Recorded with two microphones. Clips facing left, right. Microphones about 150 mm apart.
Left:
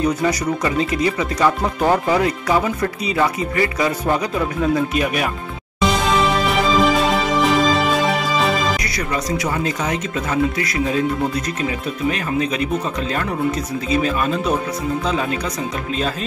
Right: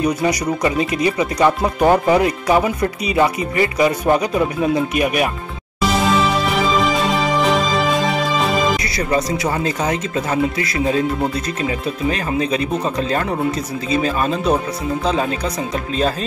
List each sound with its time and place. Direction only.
0.0 s speech: 15° right (ahead or behind)
5.9 s music: centre (ahead or behind)
8.9 s speech: 30° right (ahead or behind)
12.1 s speech: 35° right (ahead or behind)
13.8 s speech: 35° right (ahead or behind)